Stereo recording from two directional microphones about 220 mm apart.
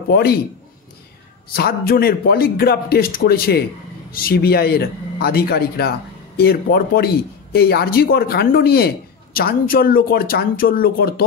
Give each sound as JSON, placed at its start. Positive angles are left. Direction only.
{"t": 0.1, "sound": "speech", "side_deg": 45}
{"t": 1.5, "sound": "speech", "side_deg": 45}